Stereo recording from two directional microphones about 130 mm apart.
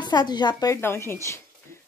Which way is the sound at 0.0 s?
35° left (ahead or behind).